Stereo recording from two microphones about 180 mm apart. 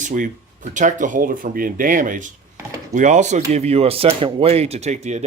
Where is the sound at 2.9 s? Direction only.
45° right (ahead or behind).